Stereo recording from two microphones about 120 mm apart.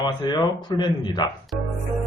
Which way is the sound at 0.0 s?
35° left (ahead or behind).